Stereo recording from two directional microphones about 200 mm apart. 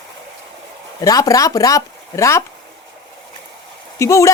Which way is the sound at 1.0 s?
15° left (ahead or behind).